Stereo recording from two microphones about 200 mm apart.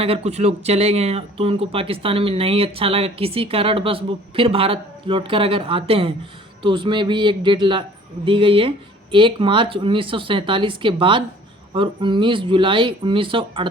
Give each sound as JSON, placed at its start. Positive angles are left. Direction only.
{"t": 0.0, "sound": "speech", "side_deg": -30}